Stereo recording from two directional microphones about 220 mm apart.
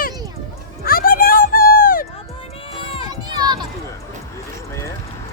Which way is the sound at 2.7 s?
25° left (ahead or behind).